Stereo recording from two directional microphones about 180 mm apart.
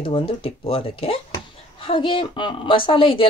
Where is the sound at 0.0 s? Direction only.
30° left (ahead or behind).